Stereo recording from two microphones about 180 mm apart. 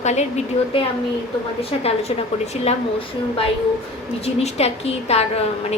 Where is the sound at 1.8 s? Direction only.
35° left (ahead or behind).